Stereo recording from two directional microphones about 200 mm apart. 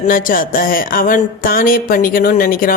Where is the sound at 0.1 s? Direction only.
45° left (ahead or behind).